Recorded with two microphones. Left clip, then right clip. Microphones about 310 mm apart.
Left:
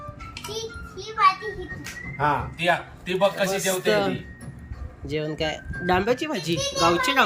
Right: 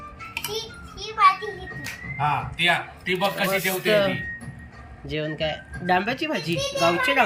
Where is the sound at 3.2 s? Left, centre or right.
Left.